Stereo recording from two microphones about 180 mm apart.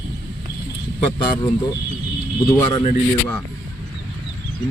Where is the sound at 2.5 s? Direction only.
25° left (ahead or behind).